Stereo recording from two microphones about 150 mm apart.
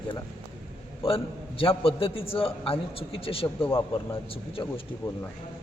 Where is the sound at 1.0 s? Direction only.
40° left (ahead or behind).